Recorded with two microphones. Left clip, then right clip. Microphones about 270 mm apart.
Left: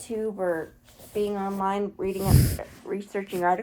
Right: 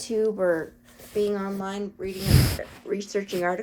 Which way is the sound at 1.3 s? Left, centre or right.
Centre.